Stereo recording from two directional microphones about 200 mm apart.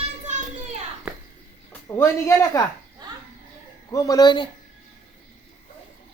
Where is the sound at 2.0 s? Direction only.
15° left (ahead or behind).